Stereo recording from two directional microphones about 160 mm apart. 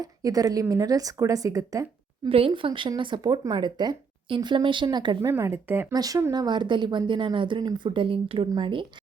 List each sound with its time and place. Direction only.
0.0 s speech: 20° right (ahead or behind)
2.3 s speech: 35° right (ahead or behind)
5.3 s speech: 15° right (ahead or behind); by 8.9 s 30° right (ahead or behind)